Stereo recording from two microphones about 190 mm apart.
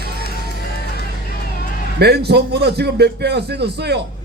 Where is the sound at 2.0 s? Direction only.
60° right (ahead or behind).